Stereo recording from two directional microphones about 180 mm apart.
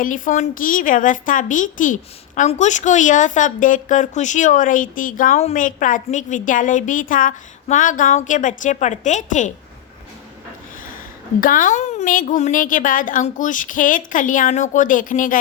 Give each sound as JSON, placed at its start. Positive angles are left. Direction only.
{"t": 0.0, "sound": "a woman's voice", "side_deg": 45}
{"t": 11.3, "sound": "a woman's voice", "side_deg": 50}